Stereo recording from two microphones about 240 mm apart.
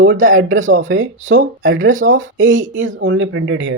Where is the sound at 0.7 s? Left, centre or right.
Right.